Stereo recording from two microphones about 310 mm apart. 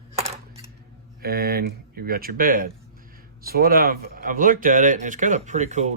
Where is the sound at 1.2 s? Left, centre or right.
Right.